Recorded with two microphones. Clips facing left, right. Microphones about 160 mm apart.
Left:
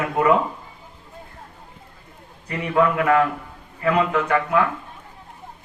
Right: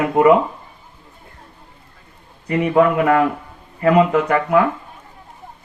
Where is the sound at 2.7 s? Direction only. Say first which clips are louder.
Right 3 dB; 20° right (ahead or behind).